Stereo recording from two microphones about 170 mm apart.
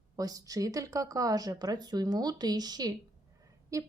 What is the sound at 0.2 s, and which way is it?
A woman's voice, 20° right (ahead or behind).